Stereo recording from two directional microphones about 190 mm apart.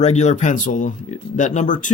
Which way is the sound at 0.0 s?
35° left (ahead or behind).